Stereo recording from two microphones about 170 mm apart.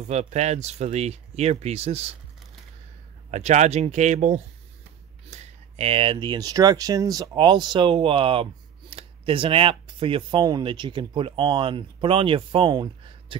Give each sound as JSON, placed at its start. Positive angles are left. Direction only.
{"t": 0.1, "sound": "speech", "side_deg": -40}
{"t": 3.3, "sound": "speech", "side_deg": -40}